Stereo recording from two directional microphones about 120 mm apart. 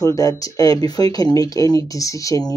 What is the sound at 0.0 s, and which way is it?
Speech, 30° left (ahead or behind).